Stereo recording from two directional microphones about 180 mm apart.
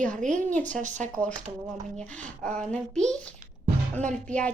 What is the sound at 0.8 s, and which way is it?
Speech, 40° right (ahead or behind).